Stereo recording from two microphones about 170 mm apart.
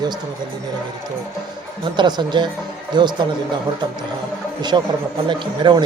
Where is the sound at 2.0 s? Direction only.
25° right (ahead or behind).